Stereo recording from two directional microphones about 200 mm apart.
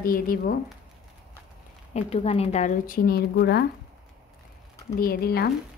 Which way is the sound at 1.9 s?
30° left (ahead or behind).